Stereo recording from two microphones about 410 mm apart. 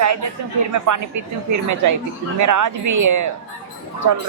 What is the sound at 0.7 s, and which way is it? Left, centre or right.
Speech, right.